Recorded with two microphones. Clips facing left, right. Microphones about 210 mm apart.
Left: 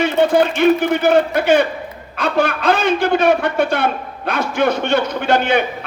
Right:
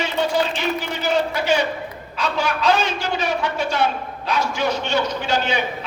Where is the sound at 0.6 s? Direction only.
55° left (ahead or behind).